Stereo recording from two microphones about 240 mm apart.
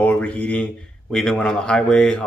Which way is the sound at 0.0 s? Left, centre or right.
Centre.